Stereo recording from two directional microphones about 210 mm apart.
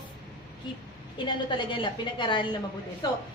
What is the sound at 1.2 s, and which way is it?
A woman's voice, 25° left (ahead or behind).